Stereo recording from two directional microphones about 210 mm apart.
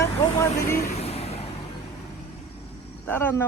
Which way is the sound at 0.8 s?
30° left (ahead or behind).